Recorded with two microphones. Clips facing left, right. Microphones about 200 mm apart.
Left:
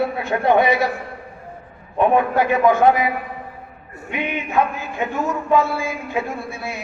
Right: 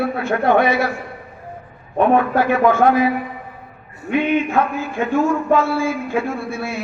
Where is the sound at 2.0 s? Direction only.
15° left (ahead or behind).